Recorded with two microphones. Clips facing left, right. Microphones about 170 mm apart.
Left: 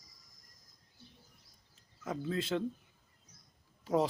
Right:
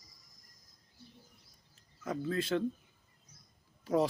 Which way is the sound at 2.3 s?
20° left (ahead or behind).